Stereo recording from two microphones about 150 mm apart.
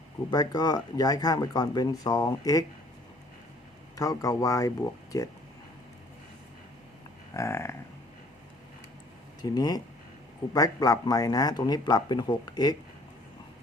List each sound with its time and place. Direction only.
0.3 s speech: 25° left (ahead or behind)
3.9 s speech: 25° left (ahead or behind)
7.3 s a sound: 20° left (ahead or behind)
9.4 s speech: 25° left (ahead or behind)